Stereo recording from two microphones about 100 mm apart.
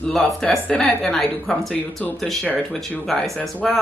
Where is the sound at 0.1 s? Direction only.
5° left (ahead or behind).